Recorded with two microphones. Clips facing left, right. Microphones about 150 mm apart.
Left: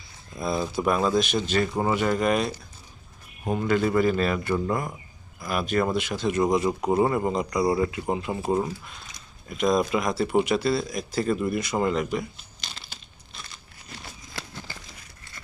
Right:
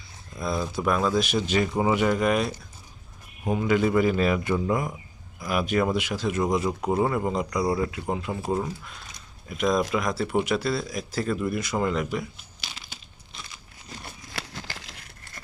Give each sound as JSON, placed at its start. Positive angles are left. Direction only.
{"t": 0.3, "sound": "speech", "side_deg": 5}
{"t": 1.2, "sound": "speech", "side_deg": -10}
{"t": 14.3, "sound": "a sound", "side_deg": -90}